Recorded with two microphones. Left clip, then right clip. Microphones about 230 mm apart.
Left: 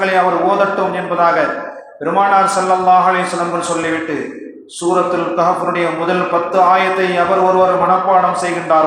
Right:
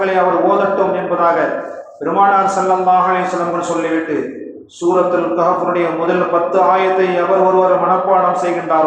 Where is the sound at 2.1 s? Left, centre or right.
Left.